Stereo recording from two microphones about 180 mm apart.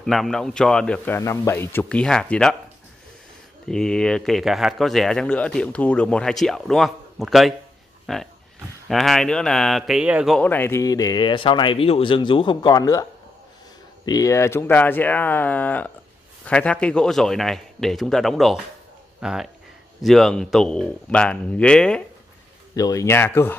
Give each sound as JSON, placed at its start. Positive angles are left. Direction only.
{"t": 0.0, "sound": "speech", "side_deg": 0}
{"t": 3.6, "sound": "speech", "side_deg": 5}
{"t": 14.0, "sound": "speech", "side_deg": 20}
{"t": 22.8, "sound": "speech", "side_deg": 20}